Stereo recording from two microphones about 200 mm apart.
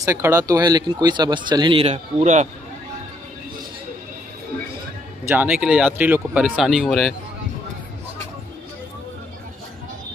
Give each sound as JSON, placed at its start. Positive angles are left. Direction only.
{"t": 0.0, "sound": "speech", "side_deg": -15}
{"t": 5.2, "sound": "speech", "side_deg": -5}